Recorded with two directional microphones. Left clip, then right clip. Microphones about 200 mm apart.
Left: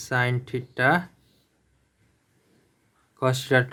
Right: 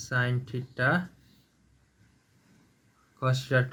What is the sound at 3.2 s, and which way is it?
Speech, 40° left (ahead or behind).